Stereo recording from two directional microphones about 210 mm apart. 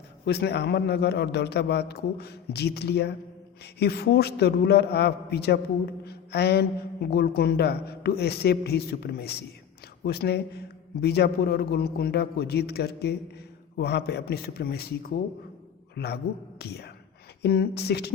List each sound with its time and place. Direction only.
0.3 s speech: 50° left (ahead or behind)